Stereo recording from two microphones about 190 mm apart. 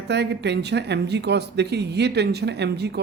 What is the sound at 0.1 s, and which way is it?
Speech, 65° right (ahead or behind).